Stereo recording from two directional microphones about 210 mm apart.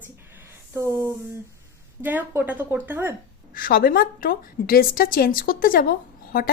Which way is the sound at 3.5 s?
45° left (ahead or behind).